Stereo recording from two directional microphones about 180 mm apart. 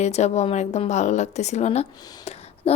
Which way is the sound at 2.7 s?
35° left (ahead or behind).